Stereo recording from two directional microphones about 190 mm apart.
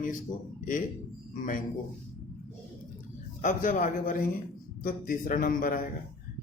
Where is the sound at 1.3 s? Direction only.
45° left (ahead or behind).